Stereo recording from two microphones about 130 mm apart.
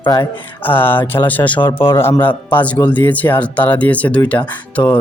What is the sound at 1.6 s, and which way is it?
Speech, 40° left (ahead or behind).